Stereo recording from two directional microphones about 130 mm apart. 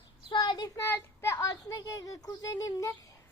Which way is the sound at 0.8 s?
15° left (ahead or behind).